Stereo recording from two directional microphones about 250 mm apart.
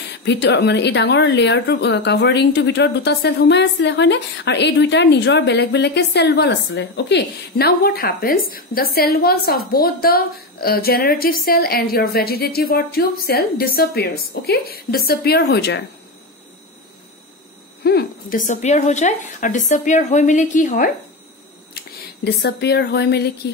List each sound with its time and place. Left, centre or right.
0.2 s a woman's voice: left
17.8 s a woman's voice: left